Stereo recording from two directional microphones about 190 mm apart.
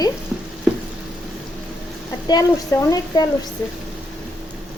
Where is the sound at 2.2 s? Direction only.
20° left (ahead or behind).